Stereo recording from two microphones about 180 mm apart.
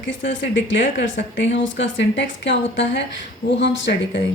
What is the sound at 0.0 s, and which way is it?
A woman's voice, 90° left.